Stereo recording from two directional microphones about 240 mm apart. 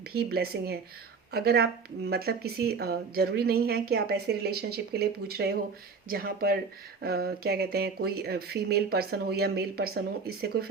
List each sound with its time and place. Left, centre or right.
0.1 s speech: right